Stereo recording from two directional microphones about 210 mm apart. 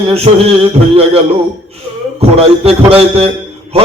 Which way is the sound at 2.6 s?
30° right (ahead or behind).